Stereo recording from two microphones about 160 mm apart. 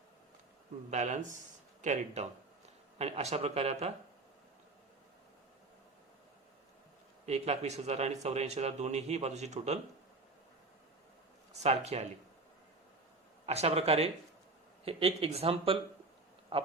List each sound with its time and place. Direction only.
0.9 s speech: 50° right (ahead or behind)
7.3 s speech: 40° right (ahead or behind)
11.5 s speech: 40° right (ahead or behind)
13.4 s speech: 40° right (ahead or behind)